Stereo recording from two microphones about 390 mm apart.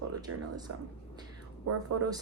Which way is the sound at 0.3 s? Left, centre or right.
Right.